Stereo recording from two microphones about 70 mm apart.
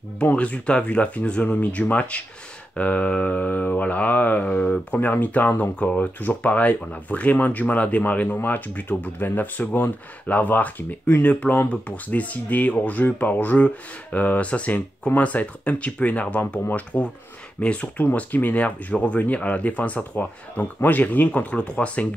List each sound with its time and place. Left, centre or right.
0.2 s speech: centre